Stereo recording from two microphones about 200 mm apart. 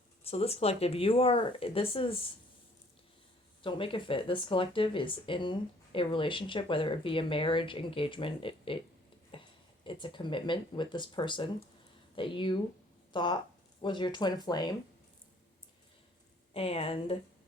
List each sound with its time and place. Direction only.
0.3 s speech: 30° left (ahead or behind)
3.6 s speech: 25° left (ahead or behind)
9.3 s a sound: 25° left (ahead or behind)
9.8 s speech: 25° left (ahead or behind)
16.6 s speech: 30° left (ahead or behind)